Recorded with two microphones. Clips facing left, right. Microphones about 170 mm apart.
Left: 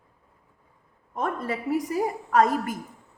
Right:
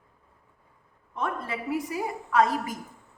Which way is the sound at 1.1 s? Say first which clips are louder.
Left 3 dB; 45° left (ahead or behind).